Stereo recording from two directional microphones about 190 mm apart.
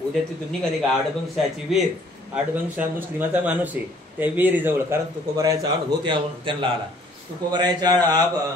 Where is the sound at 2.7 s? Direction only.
10° right (ahead or behind).